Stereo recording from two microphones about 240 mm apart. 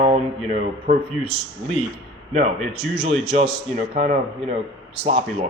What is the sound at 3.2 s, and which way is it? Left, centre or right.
A man's voice, right.